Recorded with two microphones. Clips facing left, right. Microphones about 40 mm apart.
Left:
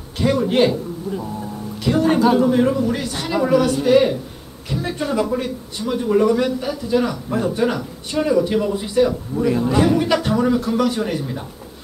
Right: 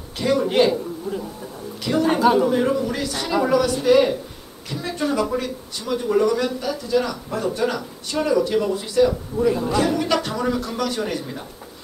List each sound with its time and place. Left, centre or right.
0.2 s speech: centre
5.9 s speech: centre
6.2 s speech: left